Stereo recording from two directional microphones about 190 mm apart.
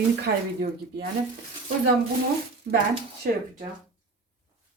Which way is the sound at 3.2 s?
55° right (ahead or behind).